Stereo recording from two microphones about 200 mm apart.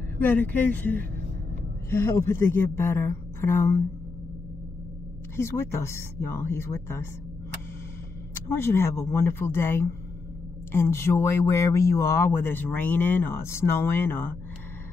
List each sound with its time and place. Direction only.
0.2 s speech: 10° left (ahead or behind)
5.3 s speech: 15° left (ahead or behind)
8.5 s speech: 10° left (ahead or behind)